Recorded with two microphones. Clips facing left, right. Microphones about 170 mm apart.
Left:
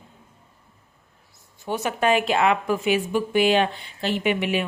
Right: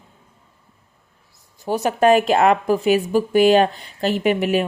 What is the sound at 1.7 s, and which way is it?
A woman's voice, 40° right (ahead or behind).